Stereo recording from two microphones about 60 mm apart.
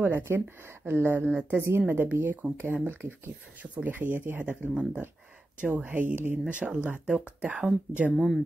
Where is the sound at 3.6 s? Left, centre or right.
Right.